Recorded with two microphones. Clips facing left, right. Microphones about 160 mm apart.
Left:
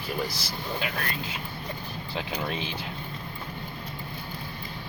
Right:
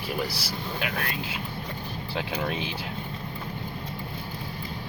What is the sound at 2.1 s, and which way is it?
Speech, 5° right (ahead or behind).